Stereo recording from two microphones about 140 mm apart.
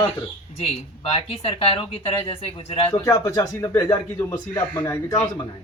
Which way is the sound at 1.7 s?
40° left (ahead or behind).